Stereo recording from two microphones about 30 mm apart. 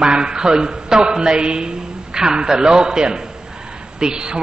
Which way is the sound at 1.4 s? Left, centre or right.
Right.